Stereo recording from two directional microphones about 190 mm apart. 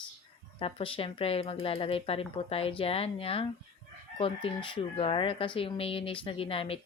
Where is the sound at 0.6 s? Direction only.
30° left (ahead or behind).